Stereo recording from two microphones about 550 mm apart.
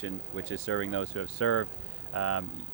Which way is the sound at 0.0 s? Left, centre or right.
Left.